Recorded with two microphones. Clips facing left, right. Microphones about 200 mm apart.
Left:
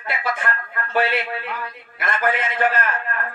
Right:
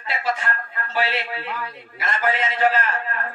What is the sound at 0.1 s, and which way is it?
A man's voice, 55° left (ahead or behind).